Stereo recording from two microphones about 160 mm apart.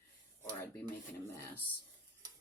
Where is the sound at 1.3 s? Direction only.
20° left (ahead or behind).